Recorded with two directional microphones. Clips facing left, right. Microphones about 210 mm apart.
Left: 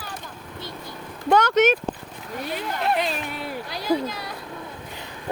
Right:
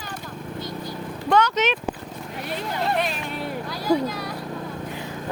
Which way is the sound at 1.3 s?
50° left (ahead or behind).